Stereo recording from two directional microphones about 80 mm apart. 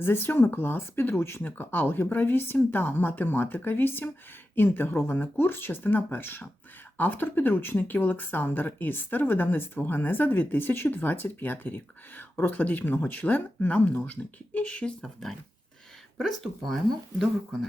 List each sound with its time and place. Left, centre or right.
0.0 s speech: left; by 16.8 s centre